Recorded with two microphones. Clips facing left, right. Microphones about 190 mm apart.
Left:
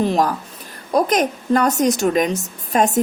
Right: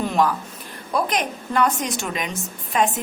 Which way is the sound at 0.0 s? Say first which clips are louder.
Left 3 dB; 35° left (ahead or behind).